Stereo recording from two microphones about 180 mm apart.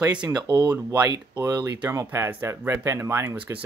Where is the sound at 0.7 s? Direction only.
10° right (ahead or behind).